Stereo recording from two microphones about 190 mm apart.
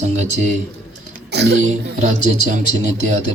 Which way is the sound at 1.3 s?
60° right (ahead or behind).